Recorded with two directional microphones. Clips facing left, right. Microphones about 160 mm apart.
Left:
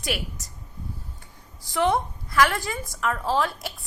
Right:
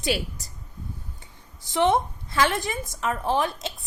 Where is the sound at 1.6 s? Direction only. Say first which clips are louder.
Right 2 dB; 20° right (ahead or behind).